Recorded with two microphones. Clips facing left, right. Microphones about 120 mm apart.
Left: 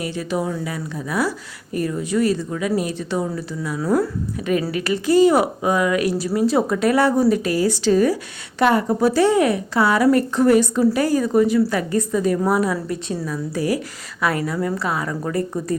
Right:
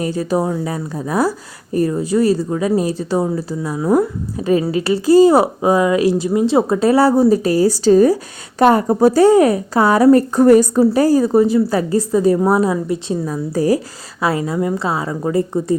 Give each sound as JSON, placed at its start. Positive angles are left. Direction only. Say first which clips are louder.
{"t": 0.0, "sound": "a woman's voice", "louder": "right 6 dB", "side_deg": -40}